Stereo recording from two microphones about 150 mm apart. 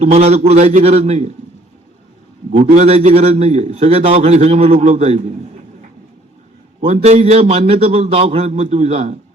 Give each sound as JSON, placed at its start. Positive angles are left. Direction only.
{"t": 0.0, "sound": "a man's voice", "side_deg": -45}
{"t": 2.5, "sound": "a man's voice", "side_deg": -45}
{"t": 6.8, "sound": "a man's voice", "side_deg": -45}